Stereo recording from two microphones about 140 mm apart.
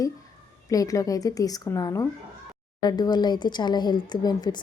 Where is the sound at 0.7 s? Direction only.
25° left (ahead or behind).